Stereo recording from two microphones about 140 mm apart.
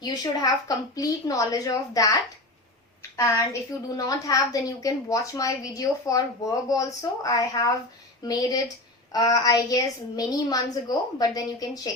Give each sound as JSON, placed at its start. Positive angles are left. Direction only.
{"t": 0.0, "sound": "a woman's voice", "side_deg": 30}
{"t": 3.2, "sound": "a woman's voice", "side_deg": 20}